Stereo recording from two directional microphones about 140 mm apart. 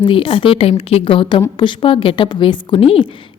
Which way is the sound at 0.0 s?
40° left (ahead or behind).